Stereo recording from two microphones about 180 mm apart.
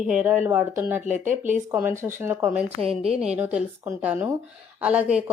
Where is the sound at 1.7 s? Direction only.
10° right (ahead or behind).